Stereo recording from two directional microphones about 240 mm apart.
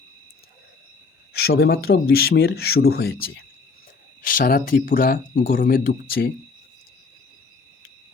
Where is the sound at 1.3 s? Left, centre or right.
Left.